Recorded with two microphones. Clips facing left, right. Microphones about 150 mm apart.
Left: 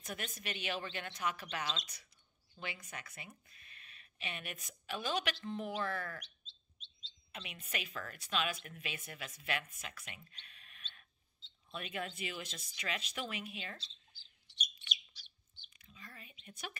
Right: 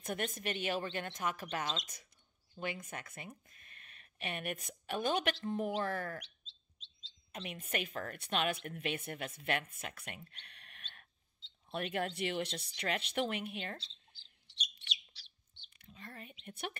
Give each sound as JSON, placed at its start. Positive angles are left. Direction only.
{"t": 0.0, "sound": "a woman's voice", "side_deg": -50}
{"t": 7.3, "sound": "a woman's voice", "side_deg": -45}
{"t": 15.8, "sound": "a sound", "side_deg": -60}